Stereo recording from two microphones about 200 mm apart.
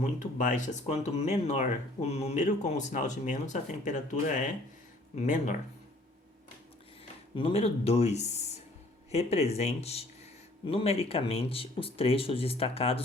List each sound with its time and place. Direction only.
0.0 s speech: 40° left (ahead or behind)
7.3 s speech: 30° left (ahead or behind)